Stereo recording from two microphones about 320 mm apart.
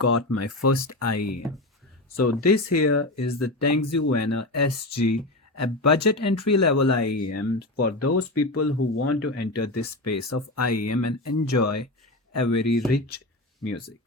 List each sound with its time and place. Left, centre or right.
0.0 s speech: left